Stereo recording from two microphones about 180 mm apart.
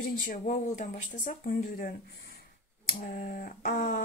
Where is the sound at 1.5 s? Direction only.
55° left (ahead or behind).